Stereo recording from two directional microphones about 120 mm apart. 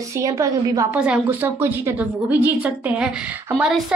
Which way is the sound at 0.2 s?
30° right (ahead or behind).